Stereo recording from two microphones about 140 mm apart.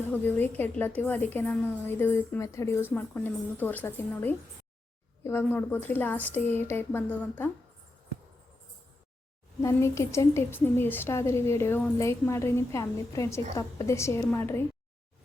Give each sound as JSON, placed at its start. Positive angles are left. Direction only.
{"t": 0.1, "sound": "a woman's voice", "side_deg": 15}
{"t": 9.6, "sound": "a woman's voice", "side_deg": 20}